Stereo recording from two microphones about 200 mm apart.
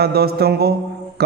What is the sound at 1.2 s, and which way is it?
Music, 55° right (ahead or behind).